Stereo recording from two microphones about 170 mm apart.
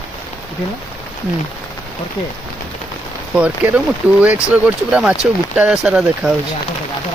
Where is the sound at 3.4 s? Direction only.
5° right (ahead or behind).